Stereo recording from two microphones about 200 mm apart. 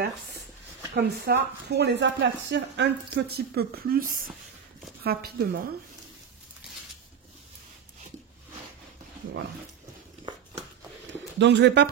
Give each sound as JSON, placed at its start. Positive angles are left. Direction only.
{"t": 0.9, "sound": "a woman's voice", "side_deg": -55}
{"t": 11.3, "sound": "speech", "side_deg": -60}